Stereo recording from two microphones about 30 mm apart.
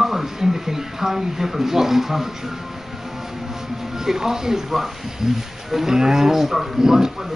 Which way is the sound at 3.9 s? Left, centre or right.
Centre.